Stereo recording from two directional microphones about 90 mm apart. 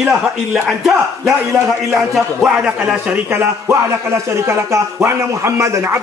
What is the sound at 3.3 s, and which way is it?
Speech, 30° right (ahead or behind).